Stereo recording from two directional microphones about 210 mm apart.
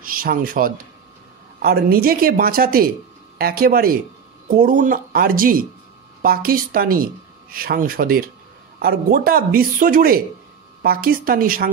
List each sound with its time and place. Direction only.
0.0 s speech: 45° right (ahead or behind)